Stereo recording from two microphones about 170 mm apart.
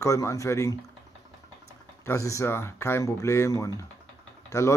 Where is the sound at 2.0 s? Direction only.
15° left (ahead or behind).